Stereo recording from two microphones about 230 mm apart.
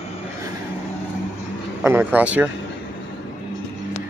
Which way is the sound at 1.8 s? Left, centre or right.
Centre.